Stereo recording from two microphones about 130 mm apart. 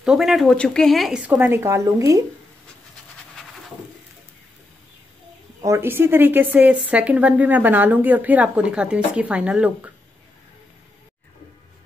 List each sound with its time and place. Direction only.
0.0 s speech: 5° right (ahead or behind)
1.3 s speech: 20° right (ahead or behind)
5.6 s speech: 20° right (ahead or behind)